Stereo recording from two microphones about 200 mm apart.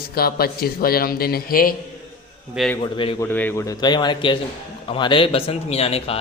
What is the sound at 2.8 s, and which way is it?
Speech, 25° left (ahead or behind).